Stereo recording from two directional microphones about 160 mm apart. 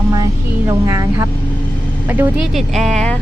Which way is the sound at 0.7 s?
20° right (ahead or behind).